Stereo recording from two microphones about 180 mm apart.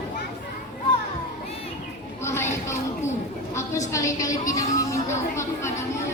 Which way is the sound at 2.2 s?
15° left (ahead or behind).